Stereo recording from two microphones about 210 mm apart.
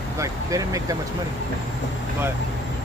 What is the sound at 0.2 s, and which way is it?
Speech, 15° right (ahead or behind).